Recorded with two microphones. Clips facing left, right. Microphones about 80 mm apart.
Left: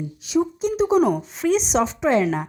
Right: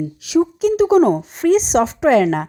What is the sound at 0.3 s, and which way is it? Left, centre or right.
Speech, right.